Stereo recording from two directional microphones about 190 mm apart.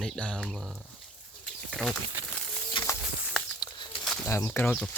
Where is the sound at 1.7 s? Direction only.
5° left (ahead or behind).